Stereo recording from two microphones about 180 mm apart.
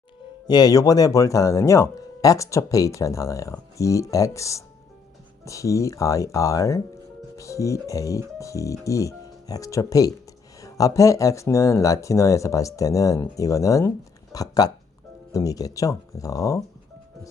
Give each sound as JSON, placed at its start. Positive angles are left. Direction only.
{"t": 0.4, "sound": "speech", "side_deg": 20}